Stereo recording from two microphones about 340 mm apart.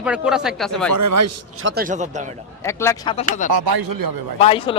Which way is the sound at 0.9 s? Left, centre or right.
Right.